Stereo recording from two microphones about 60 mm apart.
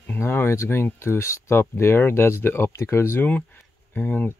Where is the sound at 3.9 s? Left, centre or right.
Left.